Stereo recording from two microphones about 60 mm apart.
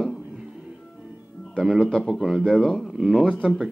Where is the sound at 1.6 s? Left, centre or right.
Centre.